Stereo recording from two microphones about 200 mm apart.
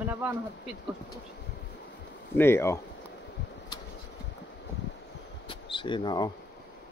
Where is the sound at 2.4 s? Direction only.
10° left (ahead or behind).